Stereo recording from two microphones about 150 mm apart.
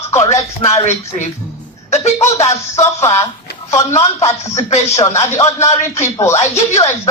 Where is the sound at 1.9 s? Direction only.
45° left (ahead or behind).